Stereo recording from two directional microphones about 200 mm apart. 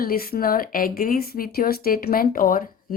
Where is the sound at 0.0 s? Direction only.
50° left (ahead or behind).